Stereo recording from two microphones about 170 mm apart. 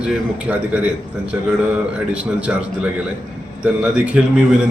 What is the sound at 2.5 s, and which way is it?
A man's voice, 5° right (ahead or behind).